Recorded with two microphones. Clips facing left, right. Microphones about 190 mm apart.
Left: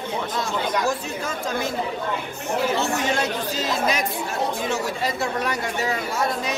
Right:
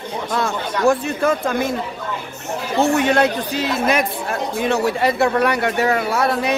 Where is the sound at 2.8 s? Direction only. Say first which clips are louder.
Right 8 dB; 60° right (ahead or behind).